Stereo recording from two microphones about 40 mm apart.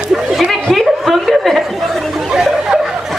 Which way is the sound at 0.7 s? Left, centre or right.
Centre.